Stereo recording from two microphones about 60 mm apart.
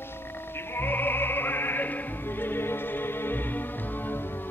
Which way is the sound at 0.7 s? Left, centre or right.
Left.